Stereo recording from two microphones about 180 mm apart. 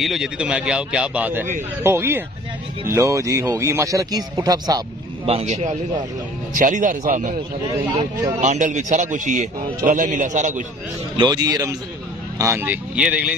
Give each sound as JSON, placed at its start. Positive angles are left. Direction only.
{"t": 0.0, "sound": "speech", "side_deg": 0}
{"t": 5.2, "sound": "a man's voice", "side_deg": -35}
{"t": 7.7, "sound": "speech", "side_deg": -25}
{"t": 8.4, "sound": "a man's voice", "side_deg": -40}
{"t": 11.1, "sound": "speech", "side_deg": -20}